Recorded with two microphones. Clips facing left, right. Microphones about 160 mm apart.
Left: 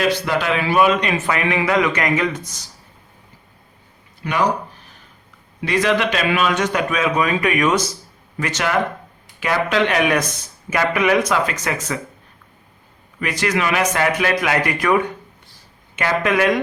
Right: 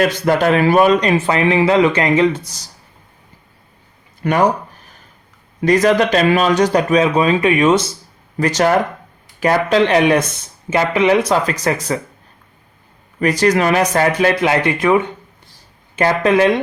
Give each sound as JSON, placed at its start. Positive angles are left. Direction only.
{"t": 0.0, "sound": "speech", "side_deg": -45}
{"t": 4.2, "sound": "speech", "side_deg": -50}
{"t": 5.5, "sound": "speech", "side_deg": -40}
{"t": 8.4, "sound": "speech", "side_deg": -40}
{"t": 13.1, "sound": "speech", "side_deg": -40}